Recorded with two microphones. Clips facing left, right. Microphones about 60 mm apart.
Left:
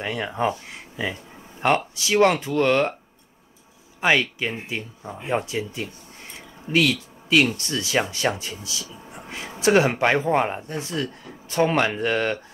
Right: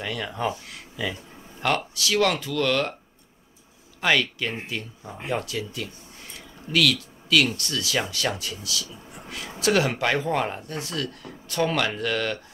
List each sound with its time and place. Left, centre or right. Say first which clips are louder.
0.0 s speech: left 4 dB; left
4.0 s speech: left 2 dB; left